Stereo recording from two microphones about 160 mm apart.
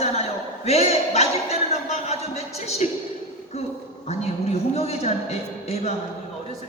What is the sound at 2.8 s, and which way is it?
Speech, 45° left (ahead or behind).